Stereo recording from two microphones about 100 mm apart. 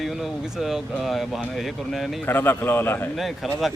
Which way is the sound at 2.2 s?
20° left (ahead or behind).